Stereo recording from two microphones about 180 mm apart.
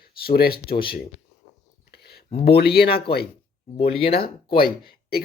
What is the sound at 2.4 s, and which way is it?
Speech, 60° left (ahead or behind).